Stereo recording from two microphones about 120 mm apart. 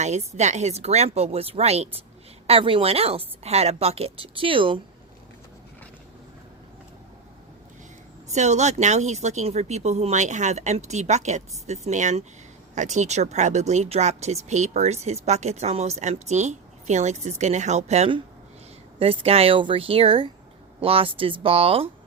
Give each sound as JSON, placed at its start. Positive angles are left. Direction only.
{"t": 0.0, "sound": "speech", "side_deg": -65}
{"t": 2.5, "sound": "a woman's voice", "side_deg": -45}
{"t": 8.3, "sound": "speech", "side_deg": -70}
{"t": 18.9, "sound": "a woman's voice", "side_deg": -55}